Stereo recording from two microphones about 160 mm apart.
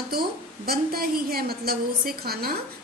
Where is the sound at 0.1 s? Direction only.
75° right (ahead or behind).